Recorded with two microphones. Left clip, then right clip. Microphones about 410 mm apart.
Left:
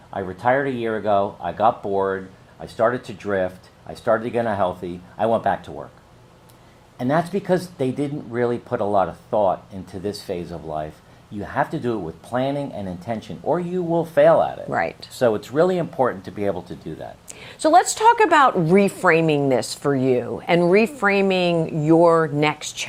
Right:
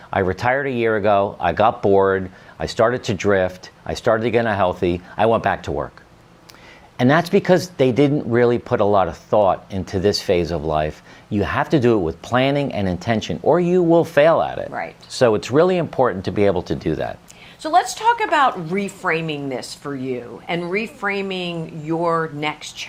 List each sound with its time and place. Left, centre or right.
0.1 s speech: right
6.9 s speech: right
14.7 s speech: left
15.2 s speech: right
17.6 s speech: left